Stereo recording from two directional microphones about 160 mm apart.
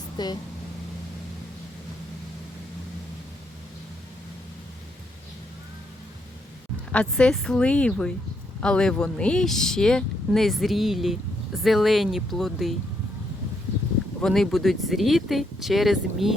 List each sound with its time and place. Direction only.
0.2 s speech: 25° left (ahead or behind)
6.9 s speech: 5° left (ahead or behind)
14.2 s speech: centre (ahead or behind)